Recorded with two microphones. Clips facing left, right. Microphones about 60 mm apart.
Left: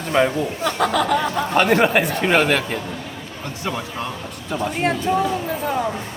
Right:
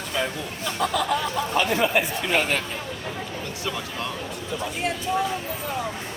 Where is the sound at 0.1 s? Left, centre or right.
Left.